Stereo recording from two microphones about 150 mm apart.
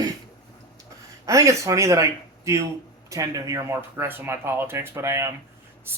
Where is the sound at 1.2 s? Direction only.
20° right (ahead or behind).